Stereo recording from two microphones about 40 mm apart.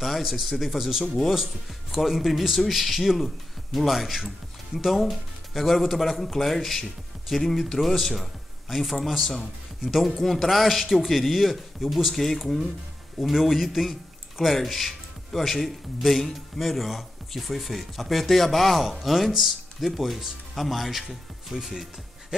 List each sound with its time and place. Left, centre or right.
0.0 s speech: centre